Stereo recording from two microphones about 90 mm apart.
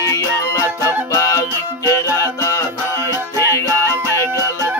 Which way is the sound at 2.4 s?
35° left (ahead or behind).